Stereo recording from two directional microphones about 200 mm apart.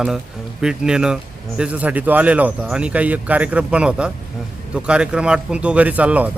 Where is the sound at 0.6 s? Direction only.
5° right (ahead or behind).